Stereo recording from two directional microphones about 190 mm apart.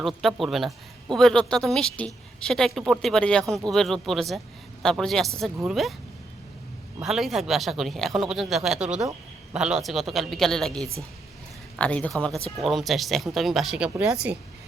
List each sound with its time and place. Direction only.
0.0 s speech: centre (ahead or behind)
7.0 s speech: centre (ahead or behind)